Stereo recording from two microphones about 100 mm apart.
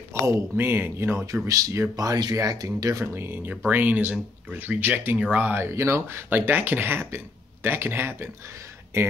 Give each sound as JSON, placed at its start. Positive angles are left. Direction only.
{"t": 0.1, "sound": "speech", "side_deg": -25}